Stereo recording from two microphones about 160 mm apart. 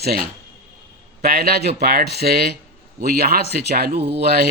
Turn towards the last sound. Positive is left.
turn(degrees=-90)